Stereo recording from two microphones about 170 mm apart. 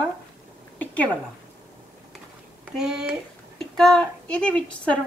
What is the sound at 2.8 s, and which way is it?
A woman's voice, 5° right (ahead or behind).